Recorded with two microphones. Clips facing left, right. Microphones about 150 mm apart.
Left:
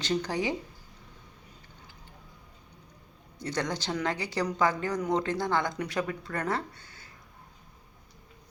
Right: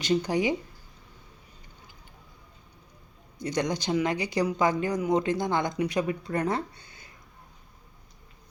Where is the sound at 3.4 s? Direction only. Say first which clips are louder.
Right 4 dB; 15° right (ahead or behind).